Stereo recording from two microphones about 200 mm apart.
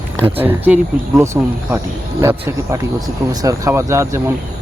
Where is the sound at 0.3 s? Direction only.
10° right (ahead or behind).